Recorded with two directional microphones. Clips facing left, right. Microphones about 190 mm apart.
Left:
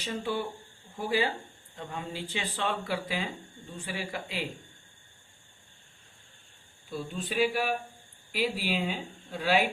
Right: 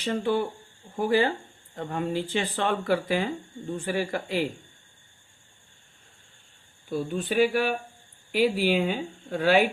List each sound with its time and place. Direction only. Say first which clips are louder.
0.0 s speech: right 7 dB; 55° right (ahead or behind)
6.9 s speech: right 7 dB; 50° right (ahead or behind)